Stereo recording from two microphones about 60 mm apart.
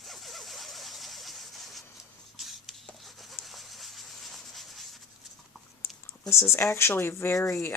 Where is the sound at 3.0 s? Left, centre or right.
Centre.